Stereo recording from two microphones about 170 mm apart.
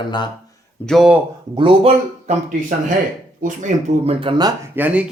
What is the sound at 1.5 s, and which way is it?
Speech, 30° right (ahead or behind).